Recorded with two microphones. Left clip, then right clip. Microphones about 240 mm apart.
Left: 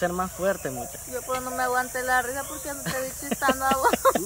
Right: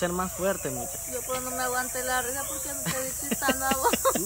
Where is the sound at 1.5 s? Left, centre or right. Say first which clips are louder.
Left 5 dB; centre.